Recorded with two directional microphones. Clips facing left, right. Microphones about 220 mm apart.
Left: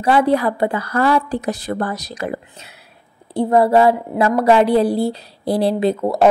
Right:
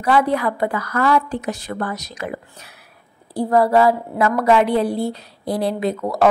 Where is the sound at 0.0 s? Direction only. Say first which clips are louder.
Left 3 dB; 30° left (ahead or behind).